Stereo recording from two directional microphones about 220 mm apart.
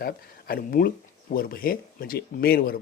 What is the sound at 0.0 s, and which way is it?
Speech, 45° left (ahead or behind).